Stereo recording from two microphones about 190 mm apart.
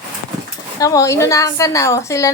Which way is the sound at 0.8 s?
15° left (ahead or behind).